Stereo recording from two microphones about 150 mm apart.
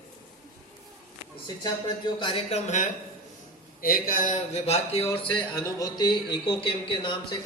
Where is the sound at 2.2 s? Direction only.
40° left (ahead or behind).